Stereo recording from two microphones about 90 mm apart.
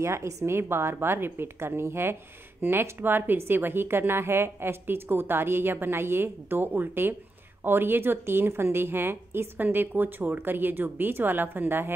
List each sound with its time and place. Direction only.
0.0 s a woman's voice: 30° right (ahead or behind)